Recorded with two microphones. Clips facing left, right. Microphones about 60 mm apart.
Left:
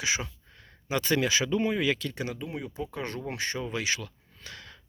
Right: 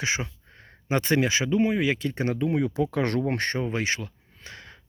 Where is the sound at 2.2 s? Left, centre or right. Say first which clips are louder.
Right 10 dB; right.